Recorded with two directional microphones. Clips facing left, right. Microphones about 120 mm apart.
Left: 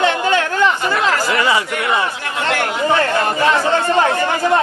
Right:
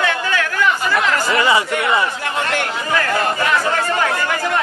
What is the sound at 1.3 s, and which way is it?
Speech, centre (ahead or behind).